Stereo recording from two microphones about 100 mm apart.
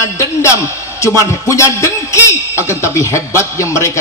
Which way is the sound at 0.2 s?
30° left (ahead or behind).